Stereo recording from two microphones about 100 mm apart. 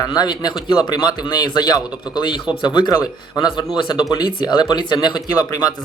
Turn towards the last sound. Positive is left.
turn(degrees=45)  # may be behind; listen again after turning